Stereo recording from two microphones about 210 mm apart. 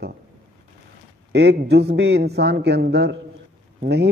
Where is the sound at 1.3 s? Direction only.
55° right (ahead or behind).